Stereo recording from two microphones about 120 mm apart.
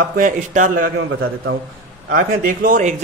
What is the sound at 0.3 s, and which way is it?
Speech, 90° right.